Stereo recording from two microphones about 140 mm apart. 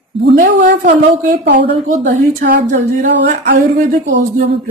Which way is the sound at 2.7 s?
70° right (ahead or behind).